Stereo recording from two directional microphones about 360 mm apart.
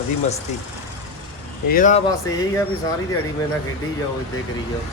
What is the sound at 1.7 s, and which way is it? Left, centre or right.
Speech, left.